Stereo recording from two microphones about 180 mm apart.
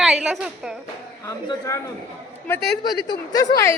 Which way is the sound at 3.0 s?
20° left (ahead or behind).